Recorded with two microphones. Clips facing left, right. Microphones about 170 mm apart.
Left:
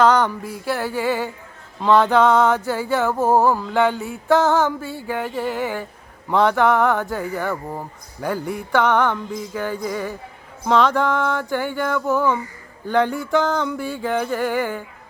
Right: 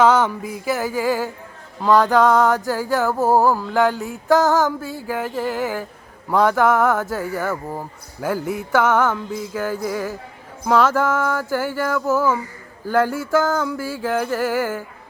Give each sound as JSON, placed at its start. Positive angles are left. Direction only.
{"t": 0.0, "sound": "speech", "side_deg": -10}
{"t": 3.1, "sound": "a sound", "side_deg": 15}
{"t": 3.5, "sound": "speech", "side_deg": -5}